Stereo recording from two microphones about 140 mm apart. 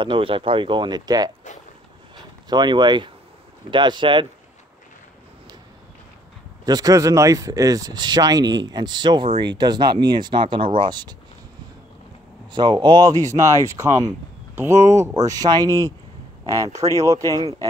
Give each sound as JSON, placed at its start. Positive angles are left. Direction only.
{"t": 0.0, "sound": "speech", "side_deg": -35}
{"t": 2.5, "sound": "speech", "side_deg": -30}
{"t": 6.6, "sound": "speech", "side_deg": -25}
{"t": 12.5, "sound": "speech", "side_deg": -30}